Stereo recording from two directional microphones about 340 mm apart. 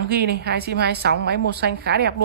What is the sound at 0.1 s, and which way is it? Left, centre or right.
A woman's voice, right.